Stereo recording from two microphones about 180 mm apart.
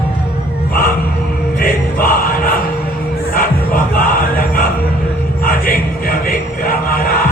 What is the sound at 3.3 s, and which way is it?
Music, 50° left (ahead or behind).